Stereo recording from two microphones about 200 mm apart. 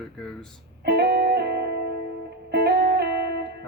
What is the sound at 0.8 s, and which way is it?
Music, 55° right (ahead or behind).